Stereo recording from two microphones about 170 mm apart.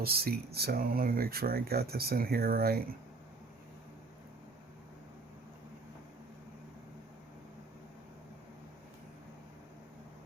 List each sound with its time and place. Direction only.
0.0 s speech: 65° right (ahead or behind)